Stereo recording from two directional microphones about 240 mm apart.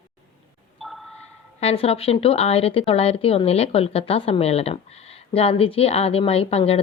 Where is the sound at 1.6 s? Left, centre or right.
Left.